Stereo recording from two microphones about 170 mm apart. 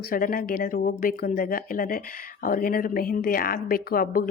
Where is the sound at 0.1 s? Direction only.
55° left (ahead or behind).